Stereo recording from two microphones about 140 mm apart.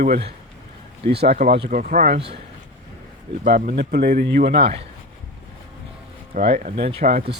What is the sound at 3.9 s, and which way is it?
Speech, 90° right.